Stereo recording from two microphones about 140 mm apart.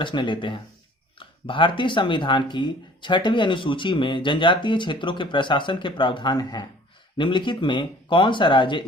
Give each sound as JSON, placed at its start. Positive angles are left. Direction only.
{"t": 0.0, "sound": "speech", "side_deg": 35}